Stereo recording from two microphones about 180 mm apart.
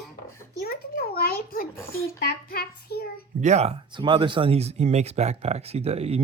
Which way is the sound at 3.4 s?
40° right (ahead or behind).